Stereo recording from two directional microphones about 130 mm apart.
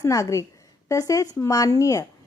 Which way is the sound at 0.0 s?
25° left (ahead or behind).